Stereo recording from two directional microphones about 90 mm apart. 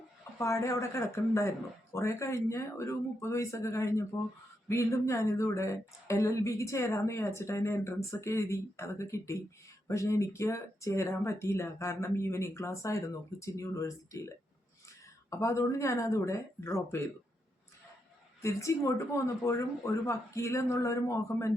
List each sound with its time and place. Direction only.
0.3 s speech: 35° left (ahead or behind)
18.4 s speech: 35° left (ahead or behind)